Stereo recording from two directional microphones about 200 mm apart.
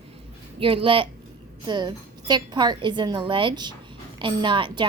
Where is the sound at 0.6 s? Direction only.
25° right (ahead or behind).